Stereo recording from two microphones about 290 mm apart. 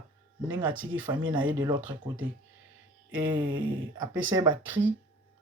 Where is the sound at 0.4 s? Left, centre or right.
Centre.